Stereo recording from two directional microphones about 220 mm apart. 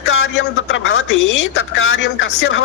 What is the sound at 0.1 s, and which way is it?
A man's voice, 60° left (ahead or behind).